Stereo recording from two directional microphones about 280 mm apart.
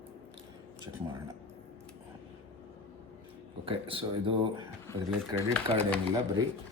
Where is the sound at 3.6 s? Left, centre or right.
Centre.